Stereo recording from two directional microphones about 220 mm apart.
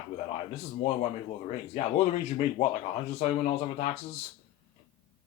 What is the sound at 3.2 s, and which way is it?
Speech, 30° left (ahead or behind).